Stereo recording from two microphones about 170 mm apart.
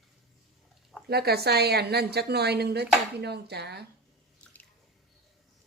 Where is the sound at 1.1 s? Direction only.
70° right (ahead or behind).